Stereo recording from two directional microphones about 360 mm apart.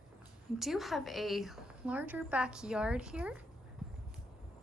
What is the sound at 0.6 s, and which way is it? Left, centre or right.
A woman's voice, centre.